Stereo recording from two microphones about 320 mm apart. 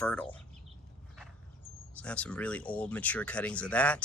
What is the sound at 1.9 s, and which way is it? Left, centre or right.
Speech, centre.